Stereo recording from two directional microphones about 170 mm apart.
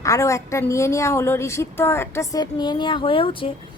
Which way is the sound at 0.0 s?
20° left (ahead or behind).